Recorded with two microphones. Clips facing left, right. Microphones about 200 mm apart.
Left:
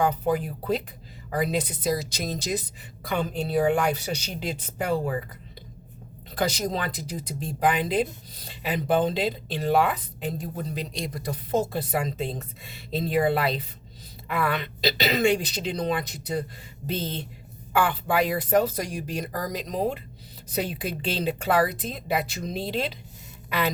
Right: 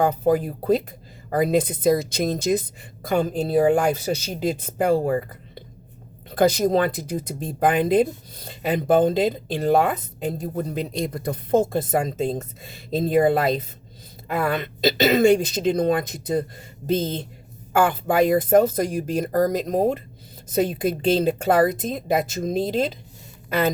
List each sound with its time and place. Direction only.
0.0 s speech: 50° right (ahead or behind)
6.3 s speech: 55° right (ahead or behind)